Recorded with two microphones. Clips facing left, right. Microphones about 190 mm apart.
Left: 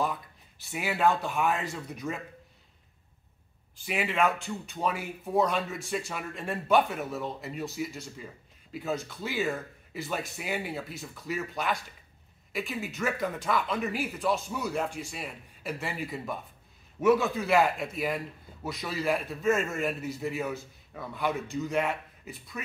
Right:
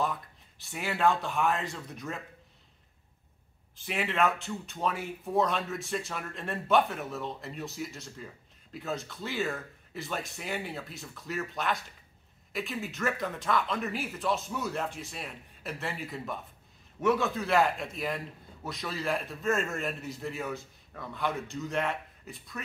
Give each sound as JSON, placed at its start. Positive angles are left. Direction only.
{"t": 0.7, "sound": "a man's voice", "side_deg": 5}
{"t": 3.8, "sound": "a man's voice", "side_deg": 0}